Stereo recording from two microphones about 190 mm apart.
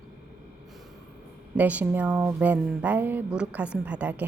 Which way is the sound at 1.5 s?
10° right (ahead or behind).